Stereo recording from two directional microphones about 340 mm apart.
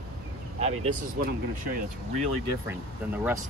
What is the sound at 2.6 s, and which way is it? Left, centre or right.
Speech, centre.